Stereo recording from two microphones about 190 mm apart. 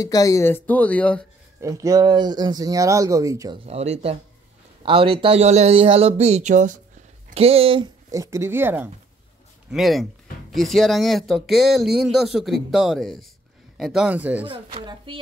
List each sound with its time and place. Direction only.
0.0 s speech: 15° left (ahead or behind)
1.6 s speech: 15° right (ahead or behind)
3.6 s speech: 35° right (ahead or behind)
8.1 s speech: 15° right (ahead or behind)
9.7 s speech: centre (ahead or behind)
14.7 s speech: 25° right (ahead or behind)